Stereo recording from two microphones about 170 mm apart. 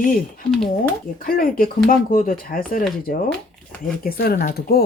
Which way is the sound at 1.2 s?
55° left (ahead or behind).